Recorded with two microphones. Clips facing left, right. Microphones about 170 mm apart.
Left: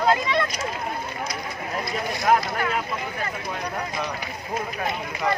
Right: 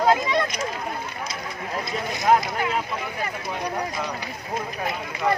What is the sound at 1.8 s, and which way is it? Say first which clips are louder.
Speech: even; 20° right (ahead or behind).